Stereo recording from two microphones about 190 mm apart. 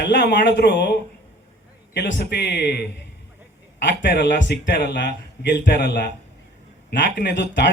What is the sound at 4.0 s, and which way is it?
Speech, 65° left (ahead or behind).